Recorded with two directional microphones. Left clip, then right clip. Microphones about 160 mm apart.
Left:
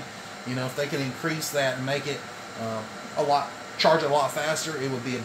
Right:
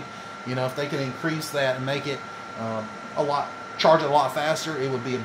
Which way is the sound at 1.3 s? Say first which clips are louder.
Right 1 dB; 35° right (ahead or behind).